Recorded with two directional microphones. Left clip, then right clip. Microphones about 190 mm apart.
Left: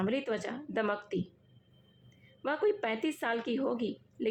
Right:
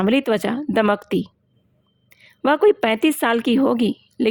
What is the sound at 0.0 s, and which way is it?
A woman's voice, 60° right (ahead or behind).